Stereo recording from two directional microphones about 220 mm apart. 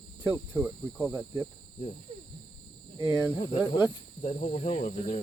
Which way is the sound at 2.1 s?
30° right (ahead or behind).